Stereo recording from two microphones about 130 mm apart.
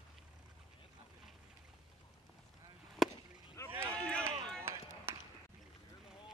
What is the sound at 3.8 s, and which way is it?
Run, 10° left (ahead or behind).